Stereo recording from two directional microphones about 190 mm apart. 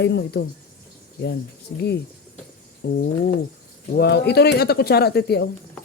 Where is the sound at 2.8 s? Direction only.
50° left (ahead or behind).